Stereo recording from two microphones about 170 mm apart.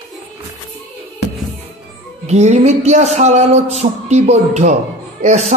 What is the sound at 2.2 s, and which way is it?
A man's voice, 40° right (ahead or behind).